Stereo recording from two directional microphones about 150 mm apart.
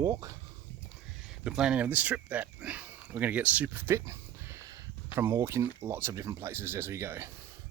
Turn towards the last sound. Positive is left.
turn(degrees=-15)  # may be behind; listen again after turning